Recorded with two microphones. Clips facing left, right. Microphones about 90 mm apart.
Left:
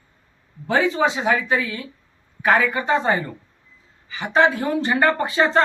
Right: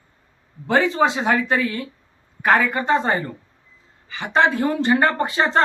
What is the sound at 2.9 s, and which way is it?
Speech, 35° right (ahead or behind).